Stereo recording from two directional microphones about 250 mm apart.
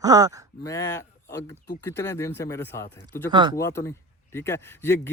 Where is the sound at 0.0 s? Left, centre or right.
Centre.